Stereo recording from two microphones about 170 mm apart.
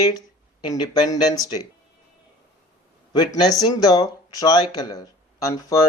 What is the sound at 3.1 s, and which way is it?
Speech, 25° left (ahead or behind).